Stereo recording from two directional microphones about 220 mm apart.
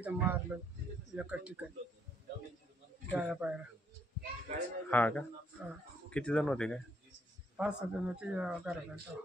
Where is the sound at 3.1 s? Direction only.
5° right (ahead or behind).